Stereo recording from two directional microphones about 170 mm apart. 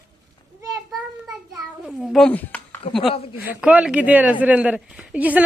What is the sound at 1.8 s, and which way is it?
Speech, centre (ahead or behind).